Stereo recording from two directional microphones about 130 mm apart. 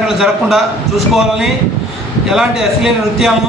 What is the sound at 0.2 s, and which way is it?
A man's voice, centre (ahead or behind).